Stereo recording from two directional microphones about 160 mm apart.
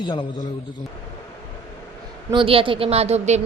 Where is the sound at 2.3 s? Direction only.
30° right (ahead or behind).